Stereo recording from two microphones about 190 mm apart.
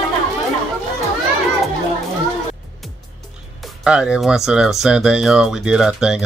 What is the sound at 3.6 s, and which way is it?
Speech, 5° right (ahead or behind).